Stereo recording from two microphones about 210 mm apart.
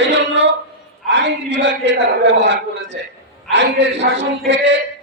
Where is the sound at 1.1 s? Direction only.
55° right (ahead or behind).